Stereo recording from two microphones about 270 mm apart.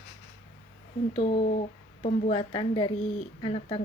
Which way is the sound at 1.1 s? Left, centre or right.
Left.